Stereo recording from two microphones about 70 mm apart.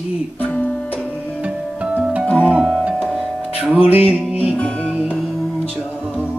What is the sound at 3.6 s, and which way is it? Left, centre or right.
Music, centre.